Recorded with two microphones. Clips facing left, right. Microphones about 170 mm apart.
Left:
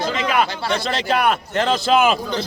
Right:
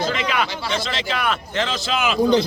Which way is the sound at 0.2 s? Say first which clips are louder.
Left 3 dB; 45° left (ahead or behind).